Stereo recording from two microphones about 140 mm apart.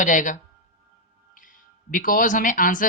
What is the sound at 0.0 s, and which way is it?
Speech, 65° left (ahead or behind).